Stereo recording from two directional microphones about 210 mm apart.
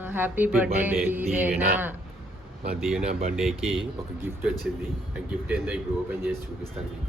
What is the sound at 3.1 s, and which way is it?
Speech, 30° right (ahead or behind).